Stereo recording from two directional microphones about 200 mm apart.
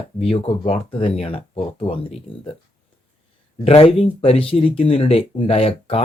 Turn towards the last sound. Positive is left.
turn(degrees=30)  # may be behind; listen again after turning